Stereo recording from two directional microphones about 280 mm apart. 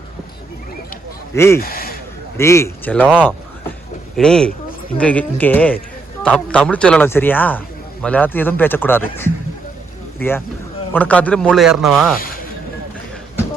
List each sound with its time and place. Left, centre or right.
1.5 s speech: left
2.4 s speech: centre
3.0 s speech: centre